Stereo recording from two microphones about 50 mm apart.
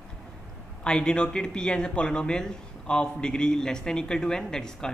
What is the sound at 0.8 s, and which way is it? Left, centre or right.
A man's voice, centre.